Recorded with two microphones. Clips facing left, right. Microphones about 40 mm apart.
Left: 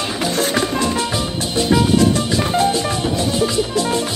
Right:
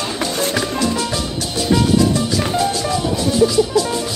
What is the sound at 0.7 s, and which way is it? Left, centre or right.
Music, left.